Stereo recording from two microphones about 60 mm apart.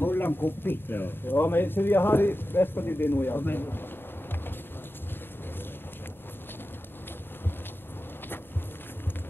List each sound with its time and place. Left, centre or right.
0.0 s speech: left